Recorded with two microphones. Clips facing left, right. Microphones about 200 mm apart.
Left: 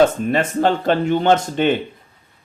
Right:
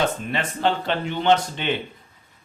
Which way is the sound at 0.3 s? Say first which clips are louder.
Left 6 dB; 45° left (ahead or behind).